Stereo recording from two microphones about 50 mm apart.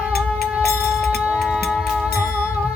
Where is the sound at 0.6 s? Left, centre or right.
Centre.